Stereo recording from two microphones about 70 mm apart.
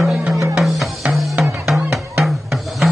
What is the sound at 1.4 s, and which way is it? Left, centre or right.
Music, centre.